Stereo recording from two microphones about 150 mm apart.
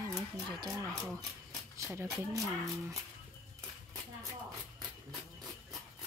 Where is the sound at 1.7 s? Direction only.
20° right (ahead or behind).